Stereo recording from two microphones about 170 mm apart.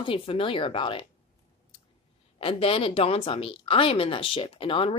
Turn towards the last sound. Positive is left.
turn(degrees=30)  # may be behind; listen again after turning